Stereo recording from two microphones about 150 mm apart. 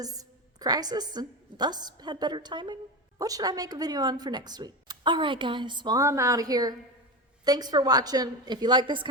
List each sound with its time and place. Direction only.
0.0 s a woman's voice: 25° right (ahead or behind)